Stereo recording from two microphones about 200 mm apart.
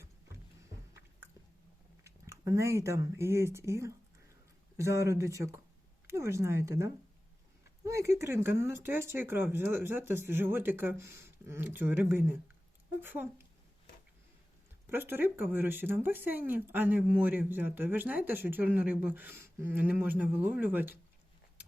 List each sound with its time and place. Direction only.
2.0 s speech: 15° right (ahead or behind)
11.0 s speech: 55° left (ahead or behind)
11.4 s speech: 10° right (ahead or behind)
14.8 s speech: 10° right (ahead or behind)